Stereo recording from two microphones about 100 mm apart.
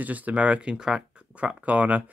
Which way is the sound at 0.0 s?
15° right (ahead or behind).